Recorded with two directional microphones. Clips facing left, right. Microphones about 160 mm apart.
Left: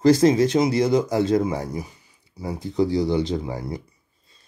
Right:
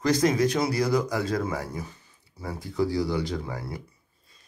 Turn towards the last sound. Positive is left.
turn(degrees=20)  # may be behind; listen again after turning